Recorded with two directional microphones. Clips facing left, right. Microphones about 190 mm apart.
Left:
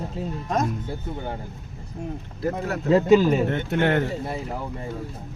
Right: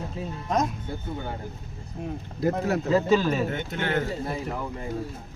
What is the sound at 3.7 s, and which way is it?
Speech, 60° left (ahead or behind).